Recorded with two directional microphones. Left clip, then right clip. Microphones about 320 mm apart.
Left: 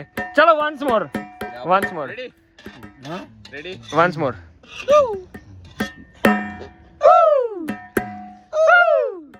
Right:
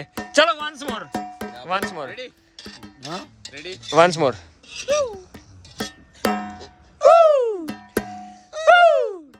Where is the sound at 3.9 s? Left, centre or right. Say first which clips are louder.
Right 2 dB; centre.